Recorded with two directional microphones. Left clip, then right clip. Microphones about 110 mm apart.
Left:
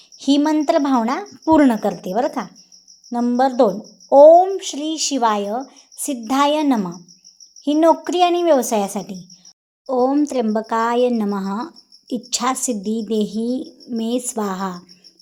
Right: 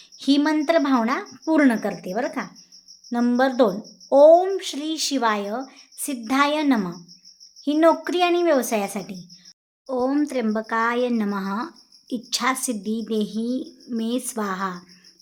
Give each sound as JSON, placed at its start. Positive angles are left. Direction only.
{"t": 0.2, "sound": "speech", "side_deg": 10}
{"t": 3.1, "sound": "a woman's voice", "side_deg": 0}